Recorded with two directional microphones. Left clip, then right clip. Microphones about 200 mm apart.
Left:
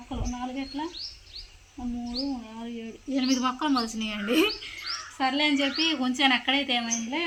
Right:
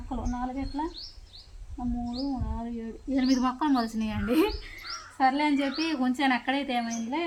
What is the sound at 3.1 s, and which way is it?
A woman's voice, 25° right (ahead or behind).